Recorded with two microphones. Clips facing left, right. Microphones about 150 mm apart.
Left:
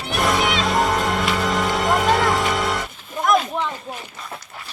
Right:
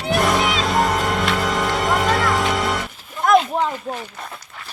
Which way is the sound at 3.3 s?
35° right (ahead or behind).